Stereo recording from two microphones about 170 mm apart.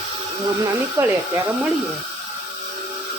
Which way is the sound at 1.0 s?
15° right (ahead or behind).